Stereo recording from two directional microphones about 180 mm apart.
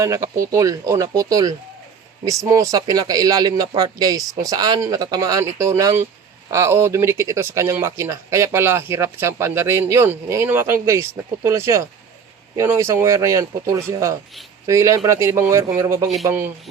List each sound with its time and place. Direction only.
0.0 s speech: 15° right (ahead or behind)